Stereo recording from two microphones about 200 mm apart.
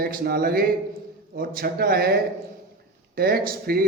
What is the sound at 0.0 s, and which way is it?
A man's voice, 45° right (ahead or behind).